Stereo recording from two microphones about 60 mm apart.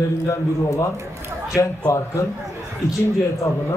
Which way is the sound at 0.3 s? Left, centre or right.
Left.